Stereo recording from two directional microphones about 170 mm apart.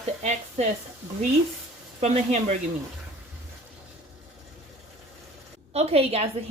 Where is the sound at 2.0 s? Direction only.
40° right (ahead or behind).